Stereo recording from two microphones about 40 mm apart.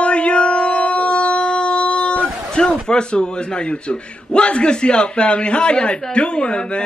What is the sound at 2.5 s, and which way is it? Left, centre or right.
Speech, left.